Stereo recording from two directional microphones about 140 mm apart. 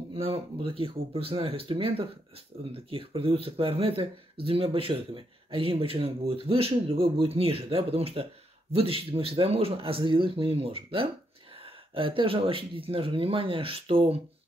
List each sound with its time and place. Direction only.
0.1 s speech: 40° right (ahead or behind)